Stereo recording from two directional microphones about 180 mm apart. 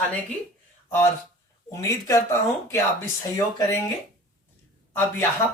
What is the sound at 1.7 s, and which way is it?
Speech, 15° left (ahead or behind).